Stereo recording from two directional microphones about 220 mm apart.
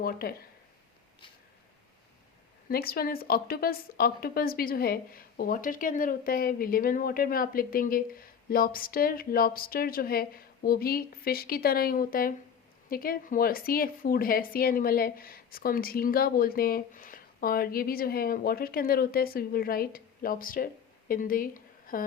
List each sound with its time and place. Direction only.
0.0 s speech: 40° left (ahead or behind)
2.6 s a woman's voice: 45° left (ahead or behind)